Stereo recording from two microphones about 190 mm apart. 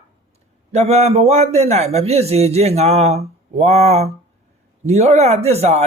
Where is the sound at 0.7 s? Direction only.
35° right (ahead or behind).